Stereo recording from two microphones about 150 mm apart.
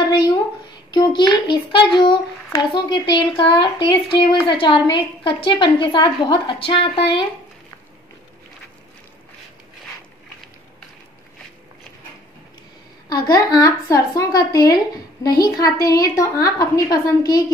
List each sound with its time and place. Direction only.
0.9 s a child's voice: 30° left (ahead or behind)
13.1 s a woman's voice: 25° left (ahead or behind)